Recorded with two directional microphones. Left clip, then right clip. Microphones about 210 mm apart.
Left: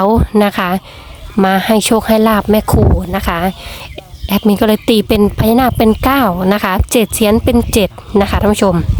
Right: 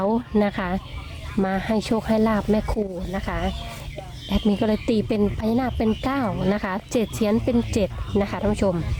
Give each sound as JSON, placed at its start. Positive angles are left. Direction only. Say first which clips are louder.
{"t": 0.0, "sound": "speech", "louder": "left 11 dB", "side_deg": 35}